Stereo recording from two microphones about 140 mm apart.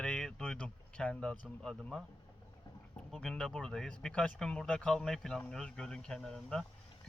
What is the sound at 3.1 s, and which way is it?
Speech, 5° left (ahead or behind).